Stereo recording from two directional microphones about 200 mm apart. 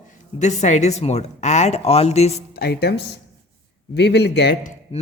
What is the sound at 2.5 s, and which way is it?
A man's voice, 50° left (ahead or behind).